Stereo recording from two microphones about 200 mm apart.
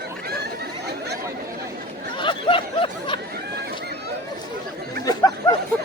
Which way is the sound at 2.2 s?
25° left (ahead or behind).